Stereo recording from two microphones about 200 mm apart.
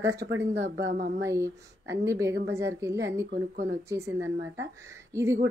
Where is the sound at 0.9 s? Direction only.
40° right (ahead or behind).